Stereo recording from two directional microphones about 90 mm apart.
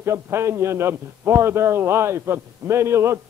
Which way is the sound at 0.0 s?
30° right (ahead or behind).